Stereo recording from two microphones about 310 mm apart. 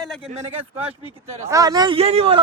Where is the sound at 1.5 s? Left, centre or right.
Centre.